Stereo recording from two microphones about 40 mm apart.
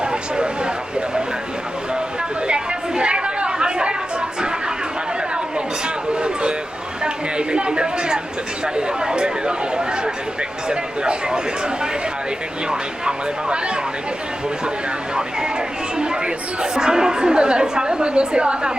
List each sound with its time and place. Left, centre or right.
0.0 s vehicle: right
2.5 s chatter: right
7.0 s a sound: right
10.7 s a woman's voice: right
16.0 s chatter: right
16.7 s a woman's voice: centre